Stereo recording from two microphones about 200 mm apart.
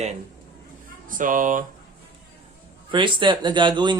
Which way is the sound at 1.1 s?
40° right (ahead or behind).